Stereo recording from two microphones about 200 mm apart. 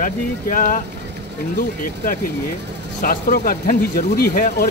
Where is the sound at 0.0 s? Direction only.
40° left (ahead or behind).